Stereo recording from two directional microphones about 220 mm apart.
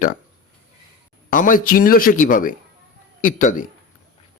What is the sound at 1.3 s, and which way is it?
A man's voice, 40° left (ahead or behind).